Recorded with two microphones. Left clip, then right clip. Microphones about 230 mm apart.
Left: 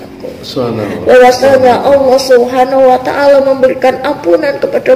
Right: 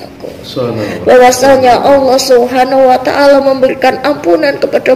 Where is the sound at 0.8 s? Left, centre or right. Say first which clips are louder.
Even; right.